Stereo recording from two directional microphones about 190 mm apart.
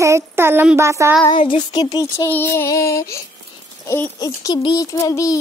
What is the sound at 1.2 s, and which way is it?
Child singing, 25° left (ahead or behind).